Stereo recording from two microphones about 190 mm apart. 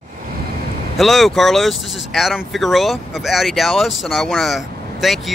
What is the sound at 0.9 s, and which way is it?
Speech, centre (ahead or behind).